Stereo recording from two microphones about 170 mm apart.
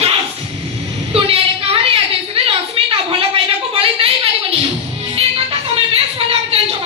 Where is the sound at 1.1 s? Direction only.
35° right (ahead or behind).